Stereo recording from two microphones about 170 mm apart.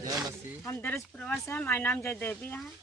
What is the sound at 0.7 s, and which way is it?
Speech, 15° left (ahead or behind).